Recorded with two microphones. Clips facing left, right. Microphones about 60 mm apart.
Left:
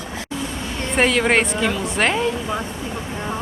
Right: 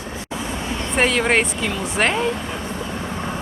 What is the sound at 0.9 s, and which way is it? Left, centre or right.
A woman's voice, centre.